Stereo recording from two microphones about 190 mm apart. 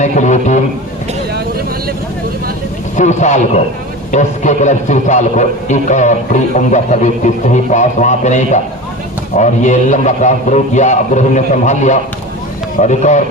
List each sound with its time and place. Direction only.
0.0 s a man's voice: 40° left (ahead or behind)
2.9 s a man's voice: 40° left (ahead or behind)